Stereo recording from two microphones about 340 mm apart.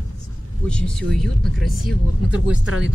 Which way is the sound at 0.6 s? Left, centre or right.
Centre.